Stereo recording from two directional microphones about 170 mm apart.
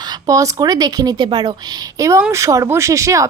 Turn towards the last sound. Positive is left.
turn(degrees=-20)  # may be behind; listen again after turning